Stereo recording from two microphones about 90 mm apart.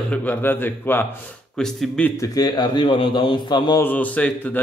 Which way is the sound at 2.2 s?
50° left (ahead or behind).